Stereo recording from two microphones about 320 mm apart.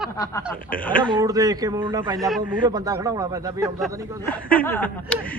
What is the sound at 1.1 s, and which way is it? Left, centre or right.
A man's voice, centre.